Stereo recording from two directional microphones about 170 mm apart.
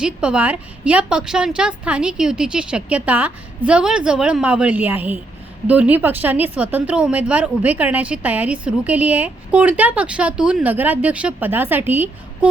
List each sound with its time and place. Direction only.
0.0 s a woman's voice: 5° right (ahead or behind)